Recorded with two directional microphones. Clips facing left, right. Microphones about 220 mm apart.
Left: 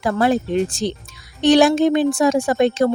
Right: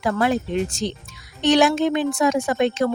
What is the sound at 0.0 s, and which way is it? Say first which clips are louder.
Speech: left 3 dB; 35° left (ahead or behind).